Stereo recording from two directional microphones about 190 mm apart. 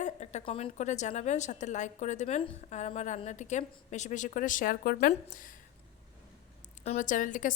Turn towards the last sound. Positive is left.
turn(degrees=45)  # may be behind; listen again after turning